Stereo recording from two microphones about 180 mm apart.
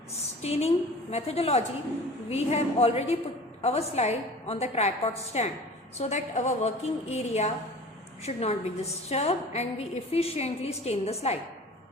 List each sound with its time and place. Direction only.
0.4 s a woman's voice: 35° left (ahead or behind)